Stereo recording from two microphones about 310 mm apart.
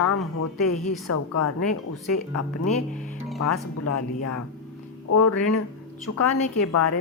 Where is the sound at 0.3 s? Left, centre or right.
Left.